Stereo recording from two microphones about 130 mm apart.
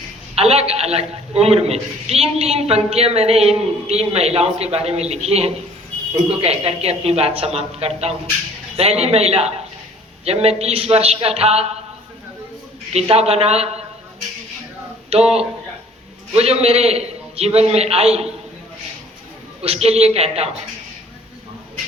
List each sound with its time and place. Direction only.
0.3 s a man's voice: 50° right (ahead or behind)
12.9 s a man's voice: 55° right (ahead or behind)
15.1 s a man's voice: 50° right (ahead or behind)
19.6 s a man's voice: 50° right (ahead or behind)